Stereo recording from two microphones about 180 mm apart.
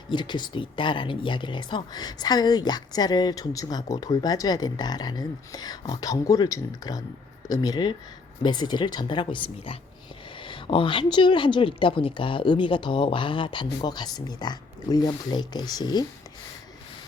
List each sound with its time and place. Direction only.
0.1 s speech: 25° left (ahead or behind)